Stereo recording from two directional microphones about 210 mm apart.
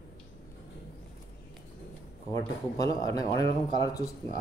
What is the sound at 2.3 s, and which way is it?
Speech, 15° left (ahead or behind).